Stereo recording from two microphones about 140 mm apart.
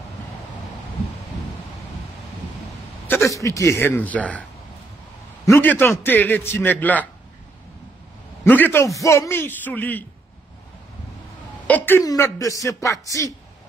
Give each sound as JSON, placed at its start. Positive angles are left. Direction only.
{"t": 3.1, "sound": "a man's voice", "side_deg": 20}
{"t": 5.5, "sound": "a man's voice", "side_deg": 15}
{"t": 8.5, "sound": "a man's voice", "side_deg": 15}
{"t": 11.6, "sound": "a man's voice", "side_deg": 15}
{"t": 12.0, "sound": "speech", "side_deg": 25}